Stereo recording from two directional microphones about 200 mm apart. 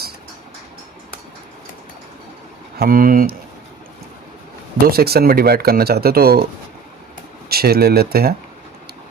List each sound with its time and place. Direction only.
2.7 s speech: 45° right (ahead or behind)
4.9 s speech: 50° right (ahead or behind)